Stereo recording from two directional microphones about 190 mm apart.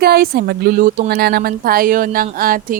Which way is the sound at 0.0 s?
55° right (ahead or behind).